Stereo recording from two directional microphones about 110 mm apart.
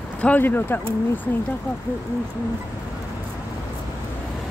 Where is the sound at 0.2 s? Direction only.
15° left (ahead or behind).